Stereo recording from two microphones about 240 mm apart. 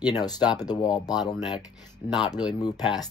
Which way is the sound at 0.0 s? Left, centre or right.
Centre.